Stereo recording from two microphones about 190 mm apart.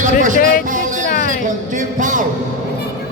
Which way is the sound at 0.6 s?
40° right (ahead or behind).